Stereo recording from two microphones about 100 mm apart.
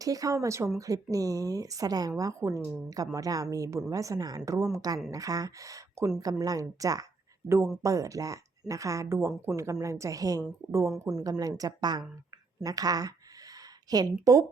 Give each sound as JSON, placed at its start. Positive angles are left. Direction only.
{"t": 0.0, "sound": "speech", "side_deg": -35}